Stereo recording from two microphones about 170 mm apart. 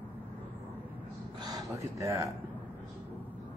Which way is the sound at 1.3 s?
25° right (ahead or behind).